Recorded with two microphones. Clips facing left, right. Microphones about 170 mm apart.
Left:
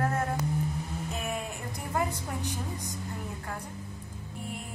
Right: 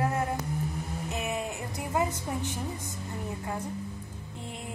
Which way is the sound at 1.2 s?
20° right (ahead or behind).